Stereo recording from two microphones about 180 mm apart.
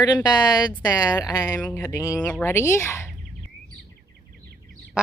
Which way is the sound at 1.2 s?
20° left (ahead or behind).